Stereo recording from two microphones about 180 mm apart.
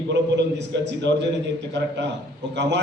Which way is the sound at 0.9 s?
75° right (ahead or behind).